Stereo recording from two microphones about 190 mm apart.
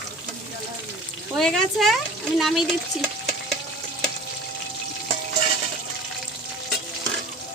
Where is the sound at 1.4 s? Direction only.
5° left (ahead or behind).